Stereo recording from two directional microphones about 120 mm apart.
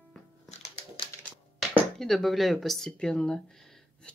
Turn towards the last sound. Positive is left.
turn(degrees=5)  # may be behind; listen again after turning